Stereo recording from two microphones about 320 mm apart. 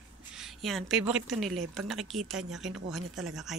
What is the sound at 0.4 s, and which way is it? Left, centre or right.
Speech, centre.